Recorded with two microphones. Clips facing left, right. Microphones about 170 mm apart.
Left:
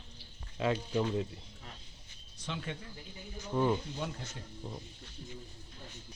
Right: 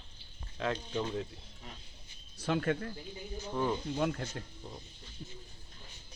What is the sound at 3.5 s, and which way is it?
Speech, 5° left (ahead or behind).